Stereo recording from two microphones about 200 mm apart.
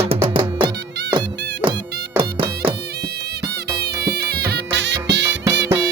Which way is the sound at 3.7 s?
55° right (ahead or behind).